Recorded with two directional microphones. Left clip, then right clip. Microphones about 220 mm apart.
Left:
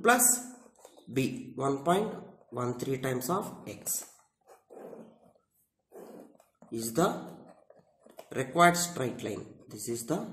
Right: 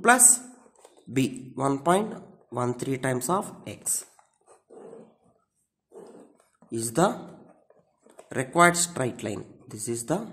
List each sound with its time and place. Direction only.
0.0 s speech: 40° right (ahead or behind)
6.7 s speech: 40° right (ahead or behind)
8.3 s speech: 40° right (ahead or behind)